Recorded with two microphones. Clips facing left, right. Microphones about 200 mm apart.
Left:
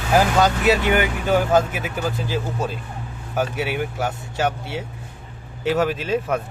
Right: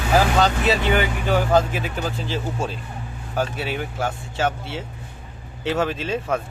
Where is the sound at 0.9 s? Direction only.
15° left (ahead or behind).